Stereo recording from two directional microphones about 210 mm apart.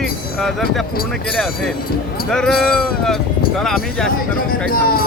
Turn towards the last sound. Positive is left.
turn(degrees=45)  # may be behind; listen again after turning